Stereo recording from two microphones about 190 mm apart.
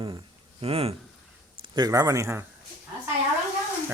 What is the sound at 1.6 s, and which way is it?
Speech, 20° right (ahead or behind).